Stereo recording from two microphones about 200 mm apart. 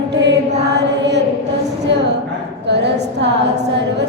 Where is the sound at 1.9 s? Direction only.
60° right (ahead or behind).